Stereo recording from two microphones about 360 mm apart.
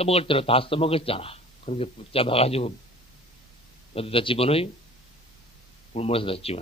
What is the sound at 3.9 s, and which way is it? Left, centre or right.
Speech, centre.